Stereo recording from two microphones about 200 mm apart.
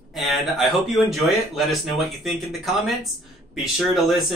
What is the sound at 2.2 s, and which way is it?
Speech, centre (ahead or behind).